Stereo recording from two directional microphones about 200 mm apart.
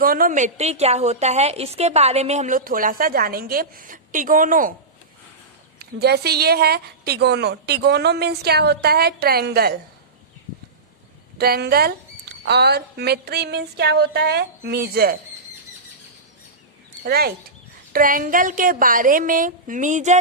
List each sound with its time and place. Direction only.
0.0 s a woman's voice: 45° right (ahead or behind)
5.8 s a woman's voice: 55° right (ahead or behind)
11.3 s a woman's voice: 50° right (ahead or behind)
17.1 s a woman's voice: 50° right (ahead or behind)